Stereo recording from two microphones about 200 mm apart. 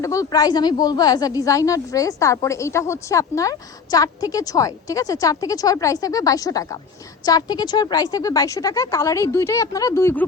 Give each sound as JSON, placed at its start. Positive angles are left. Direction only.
{"t": 0.0, "sound": "speech", "side_deg": 15}